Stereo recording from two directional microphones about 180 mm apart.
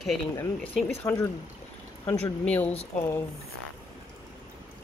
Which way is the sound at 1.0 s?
15° left (ahead or behind).